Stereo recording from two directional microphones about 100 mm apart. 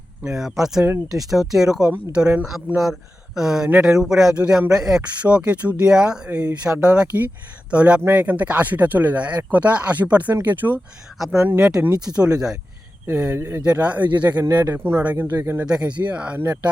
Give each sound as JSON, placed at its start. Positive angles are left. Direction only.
{"t": 0.3, "sound": "speech", "side_deg": -5}
{"t": 13.3, "sound": "speech", "side_deg": -25}
{"t": 13.7, "sound": "speech", "side_deg": -15}
{"t": 15.6, "sound": "speech", "side_deg": -10}